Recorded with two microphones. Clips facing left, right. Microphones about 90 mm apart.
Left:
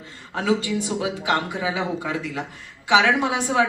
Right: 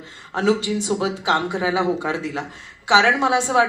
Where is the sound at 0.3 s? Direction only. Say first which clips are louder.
Right 3 dB; 25° right (ahead or behind).